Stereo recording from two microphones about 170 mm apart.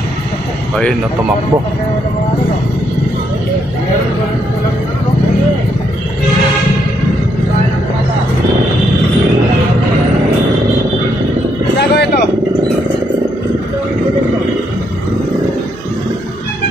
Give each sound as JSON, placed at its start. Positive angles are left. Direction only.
{"t": 11.9, "sound": "vehicle", "side_deg": 75}